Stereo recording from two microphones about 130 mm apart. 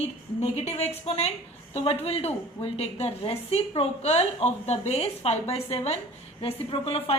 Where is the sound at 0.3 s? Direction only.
55° left (ahead or behind).